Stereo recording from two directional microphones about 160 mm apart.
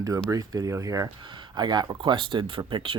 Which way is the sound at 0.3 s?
20° right (ahead or behind).